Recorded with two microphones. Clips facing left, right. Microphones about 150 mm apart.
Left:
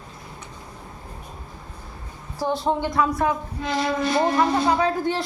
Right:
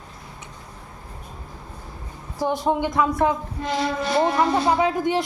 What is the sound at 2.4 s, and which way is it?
Speech, 15° right (ahead or behind).